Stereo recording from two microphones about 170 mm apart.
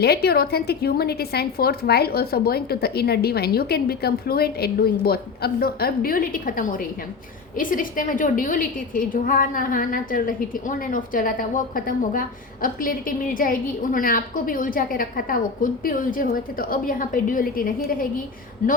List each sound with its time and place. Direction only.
0.0 s a woman's voice: 70° left (ahead or behind); by 18.8 s 55° left (ahead or behind)